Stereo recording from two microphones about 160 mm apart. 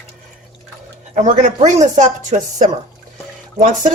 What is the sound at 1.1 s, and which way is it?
A woman's voice, 50° right (ahead or behind).